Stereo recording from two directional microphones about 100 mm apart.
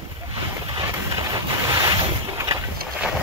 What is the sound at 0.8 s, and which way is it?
Boat, 40° right (ahead or behind).